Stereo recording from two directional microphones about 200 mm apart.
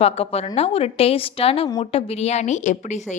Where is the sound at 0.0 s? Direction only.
30° left (ahead or behind).